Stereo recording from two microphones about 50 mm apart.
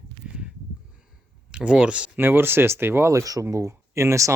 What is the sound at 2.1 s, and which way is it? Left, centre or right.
Speech, right.